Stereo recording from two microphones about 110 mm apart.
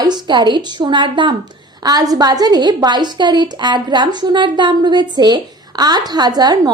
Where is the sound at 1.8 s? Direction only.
35° right (ahead or behind).